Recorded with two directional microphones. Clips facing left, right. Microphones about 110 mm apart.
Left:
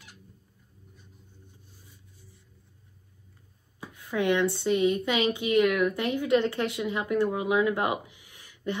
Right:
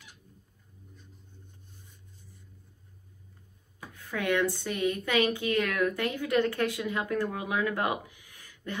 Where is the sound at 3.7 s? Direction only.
15° left (ahead or behind).